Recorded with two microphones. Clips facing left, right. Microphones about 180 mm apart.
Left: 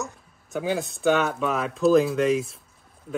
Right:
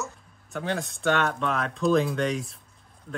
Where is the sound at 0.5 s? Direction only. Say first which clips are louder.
Left 4 dB; 5° left (ahead or behind).